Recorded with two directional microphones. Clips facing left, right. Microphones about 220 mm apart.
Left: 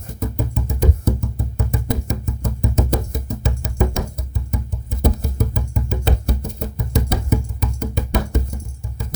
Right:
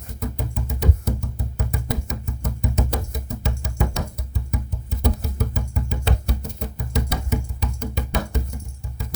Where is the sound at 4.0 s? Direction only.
50° left (ahead or behind).